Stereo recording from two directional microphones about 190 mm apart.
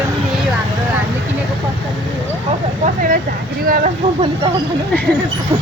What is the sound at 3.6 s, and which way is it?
Speech, 50° right (ahead or behind).